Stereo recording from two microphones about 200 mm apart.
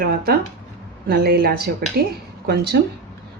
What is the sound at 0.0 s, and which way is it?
Speech, 50° right (ahead or behind).